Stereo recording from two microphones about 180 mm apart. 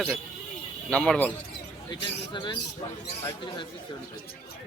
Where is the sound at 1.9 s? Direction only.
25° left (ahead or behind).